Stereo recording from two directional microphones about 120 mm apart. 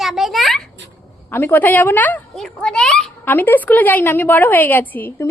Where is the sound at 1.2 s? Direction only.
20° left (ahead or behind).